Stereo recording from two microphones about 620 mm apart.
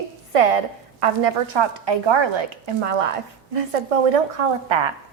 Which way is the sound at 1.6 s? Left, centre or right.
Right.